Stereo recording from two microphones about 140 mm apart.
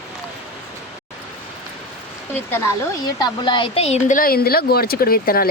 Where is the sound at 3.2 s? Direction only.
30° left (ahead or behind).